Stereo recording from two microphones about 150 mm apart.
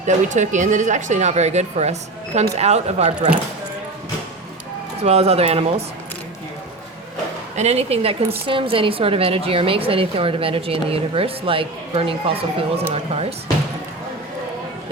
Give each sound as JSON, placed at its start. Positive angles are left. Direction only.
{"t": 0.0, "sound": "speech", "side_deg": -55}
{"t": 5.0, "sound": "speech", "side_deg": -45}
{"t": 7.5, "sound": "a woman's voice", "side_deg": -45}